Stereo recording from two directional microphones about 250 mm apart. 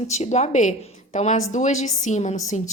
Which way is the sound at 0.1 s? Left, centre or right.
Left.